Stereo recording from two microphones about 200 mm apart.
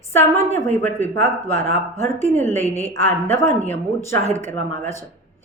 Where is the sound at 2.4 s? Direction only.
10° left (ahead or behind).